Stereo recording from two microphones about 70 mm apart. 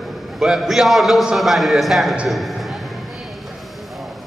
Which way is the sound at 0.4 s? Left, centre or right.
Centre.